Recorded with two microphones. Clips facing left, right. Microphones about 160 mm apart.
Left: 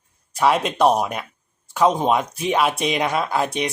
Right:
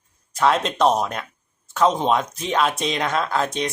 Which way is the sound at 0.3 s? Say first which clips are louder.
Left 1 dB; 10° left (ahead or behind).